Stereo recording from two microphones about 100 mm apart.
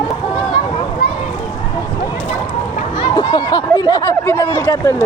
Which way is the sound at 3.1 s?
50° left (ahead or behind).